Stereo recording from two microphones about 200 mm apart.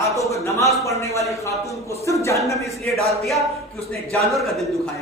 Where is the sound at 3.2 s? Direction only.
Centre (ahead or behind).